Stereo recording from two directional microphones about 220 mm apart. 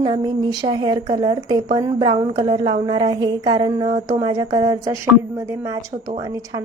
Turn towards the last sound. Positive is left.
turn(degrees=-15)  # may be behind; listen again after turning